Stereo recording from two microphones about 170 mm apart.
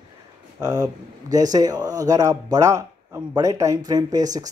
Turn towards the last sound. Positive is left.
turn(degrees=-20)  # may be behind; listen again after turning